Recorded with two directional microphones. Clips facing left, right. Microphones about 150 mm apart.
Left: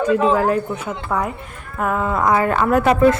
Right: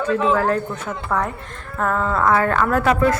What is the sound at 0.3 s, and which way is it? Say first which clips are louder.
A woman's voice: left 2 dB; 10° left (ahead or behind).